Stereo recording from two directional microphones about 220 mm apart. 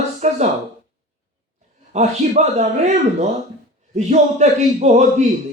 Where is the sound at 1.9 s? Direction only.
30° right (ahead or behind).